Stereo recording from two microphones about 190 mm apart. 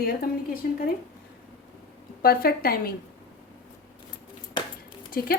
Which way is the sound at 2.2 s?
50° left (ahead or behind).